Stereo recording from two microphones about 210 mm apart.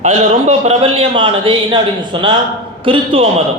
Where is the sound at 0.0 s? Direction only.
30° right (ahead or behind).